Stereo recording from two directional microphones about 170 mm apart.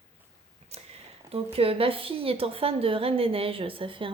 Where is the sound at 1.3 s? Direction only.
35° right (ahead or behind).